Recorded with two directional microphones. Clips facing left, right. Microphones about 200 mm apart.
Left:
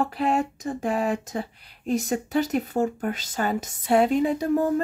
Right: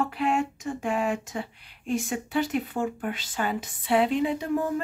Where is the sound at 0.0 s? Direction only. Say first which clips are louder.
Left 2 dB; 35° left (ahead or behind).